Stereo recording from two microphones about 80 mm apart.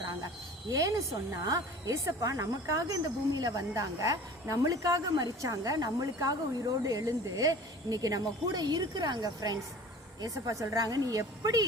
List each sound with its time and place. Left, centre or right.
0.7 s speech: right